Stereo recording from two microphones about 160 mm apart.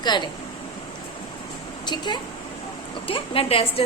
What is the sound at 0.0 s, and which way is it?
Speech, 25° left (ahead or behind).